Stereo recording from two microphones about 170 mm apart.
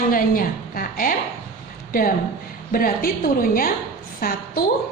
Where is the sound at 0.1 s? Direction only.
55° left (ahead or behind).